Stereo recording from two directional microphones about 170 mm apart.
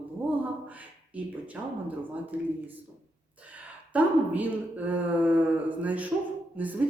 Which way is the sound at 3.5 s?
10° right (ahead or behind).